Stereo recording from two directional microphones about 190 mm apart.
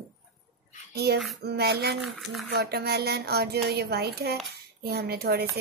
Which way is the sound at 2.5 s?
55° right (ahead or behind).